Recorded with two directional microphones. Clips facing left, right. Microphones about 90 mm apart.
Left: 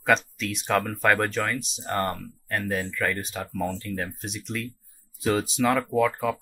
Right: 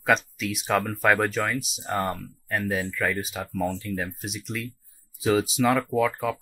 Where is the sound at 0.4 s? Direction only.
5° right (ahead or behind).